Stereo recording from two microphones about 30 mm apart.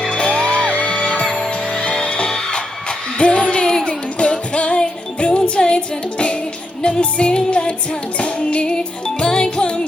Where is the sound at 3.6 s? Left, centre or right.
Left.